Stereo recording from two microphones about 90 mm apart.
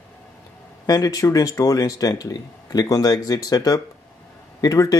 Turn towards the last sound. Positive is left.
turn(degrees=40)  # may be behind; listen again after turning